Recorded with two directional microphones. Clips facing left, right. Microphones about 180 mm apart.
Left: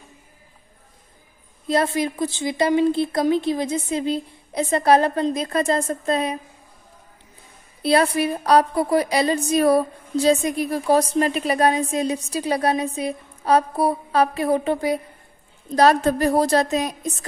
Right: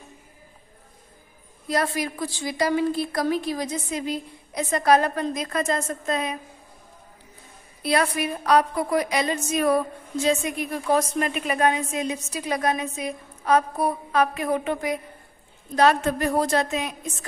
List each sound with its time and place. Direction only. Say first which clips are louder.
1.7 s a woman's voice: left 4 dB; 25° left (ahead or behind)
7.8 s a woman's voice: left 5 dB; 30° left (ahead or behind)